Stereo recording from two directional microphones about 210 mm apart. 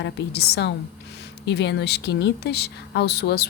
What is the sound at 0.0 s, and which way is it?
Speech, 55° left (ahead or behind).